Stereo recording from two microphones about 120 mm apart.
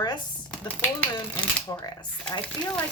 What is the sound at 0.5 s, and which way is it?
Speech, 10° left (ahead or behind).